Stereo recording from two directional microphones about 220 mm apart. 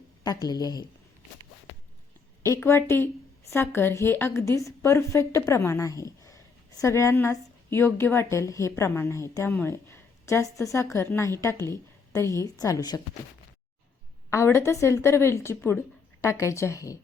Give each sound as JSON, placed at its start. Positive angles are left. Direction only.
{"t": 0.2, "sound": "a woman's voice", "side_deg": 15}
{"t": 2.4, "sound": "a woman's voice", "side_deg": 10}
{"t": 14.3, "sound": "a woman's voice", "side_deg": 10}